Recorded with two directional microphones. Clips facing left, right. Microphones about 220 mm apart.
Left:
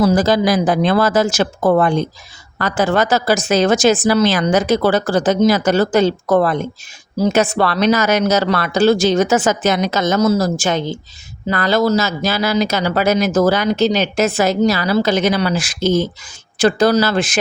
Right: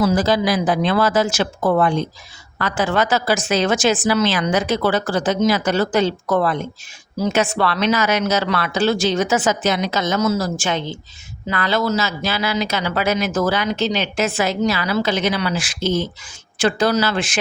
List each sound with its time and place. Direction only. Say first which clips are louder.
0.0 s speech: left 3 dB; 45° left (ahead or behind)